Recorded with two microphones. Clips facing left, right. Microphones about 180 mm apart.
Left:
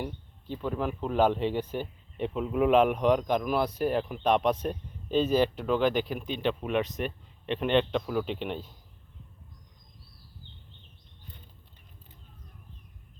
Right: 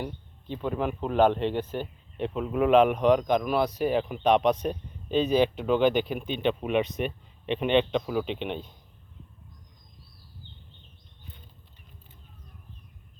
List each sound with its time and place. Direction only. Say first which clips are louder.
0.0 s speech: right 1 dB; 5° left (ahead or behind)
5.5 s speech: right 3 dB; 20° right (ahead or behind)
6.8 s speech: right 3 dB; centre (ahead or behind)
8.3 s speech: right 1 dB; 20° right (ahead or behind)